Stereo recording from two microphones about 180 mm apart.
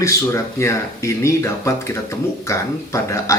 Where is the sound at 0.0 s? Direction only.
15° left (ahead or behind).